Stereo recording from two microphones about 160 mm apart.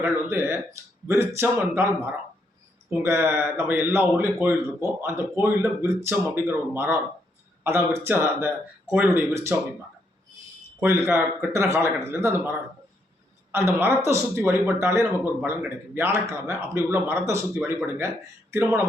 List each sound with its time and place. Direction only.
0.0 s a man's voice: 15° right (ahead or behind)
2.9 s a man's voice: 15° right (ahead or behind)
10.8 s a man's voice: 15° right (ahead or behind)
13.5 s a man's voice: 15° right (ahead or behind)